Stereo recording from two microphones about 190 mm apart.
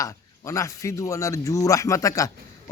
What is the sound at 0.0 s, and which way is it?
Speech, 15° left (ahead or behind).